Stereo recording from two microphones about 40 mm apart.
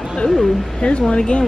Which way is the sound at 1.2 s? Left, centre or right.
Left.